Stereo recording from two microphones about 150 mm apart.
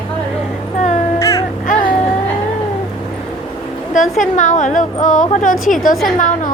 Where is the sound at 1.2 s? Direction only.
20° left (ahead or behind).